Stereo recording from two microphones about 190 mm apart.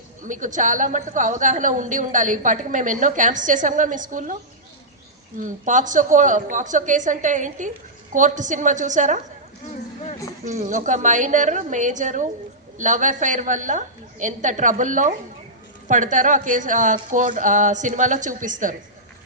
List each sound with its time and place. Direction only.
0.2 s a woman's voice: 40° right (ahead or behind)
5.4 s a woman's voice: 40° right (ahead or behind)
10.4 s a woman's voice: 40° right (ahead or behind)